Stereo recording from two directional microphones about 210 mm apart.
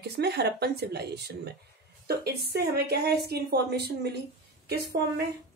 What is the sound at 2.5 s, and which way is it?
Speech, 50° right (ahead or behind).